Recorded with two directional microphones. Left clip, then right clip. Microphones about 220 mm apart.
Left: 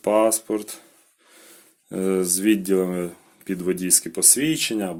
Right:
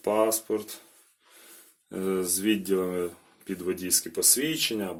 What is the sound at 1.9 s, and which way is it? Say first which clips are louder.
Speech: left 6 dB; 40° left (ahead or behind).